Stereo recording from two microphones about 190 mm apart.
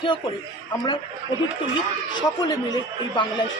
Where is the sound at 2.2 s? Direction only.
20° left (ahead or behind).